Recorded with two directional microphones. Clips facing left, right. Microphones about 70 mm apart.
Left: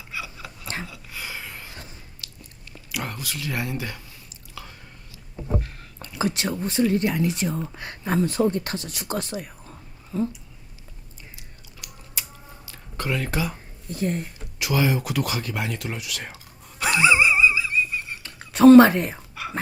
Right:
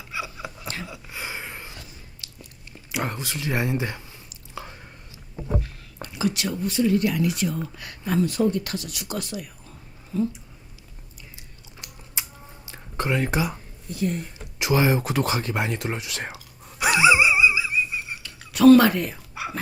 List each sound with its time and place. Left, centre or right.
0.1 s a sound: right
2.2 s biting: right
2.9 s speech: right
4.5 s chewing: right
5.8 s speech: left
11.3 s a sound: right
12.6 s speech: right
13.9 s speech: left
14.6 s speech: right
16.6 s a sound: centre
16.9 s dog: centre
18.2 s whispering: left
19.3 s whispering: centre